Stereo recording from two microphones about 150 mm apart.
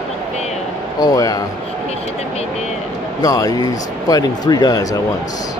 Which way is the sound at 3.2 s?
25° left (ahead or behind).